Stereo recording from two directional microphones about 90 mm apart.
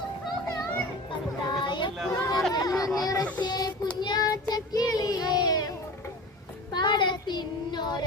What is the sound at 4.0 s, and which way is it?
Child singing, 50° left (ahead or behind).